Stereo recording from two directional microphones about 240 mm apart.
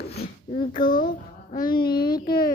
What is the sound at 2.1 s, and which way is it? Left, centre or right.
Speech, left.